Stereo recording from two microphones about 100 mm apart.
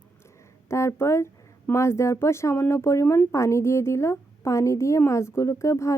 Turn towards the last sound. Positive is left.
turn(degrees=30)  # may be behind; listen again after turning